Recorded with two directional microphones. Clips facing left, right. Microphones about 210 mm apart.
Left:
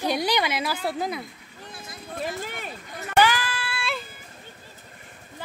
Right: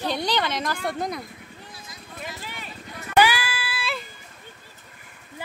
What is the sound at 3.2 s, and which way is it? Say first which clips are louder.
Child singing: left 2 dB; 10° right (ahead or behind).